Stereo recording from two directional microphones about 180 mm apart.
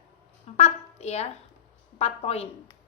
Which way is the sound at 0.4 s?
35° left (ahead or behind).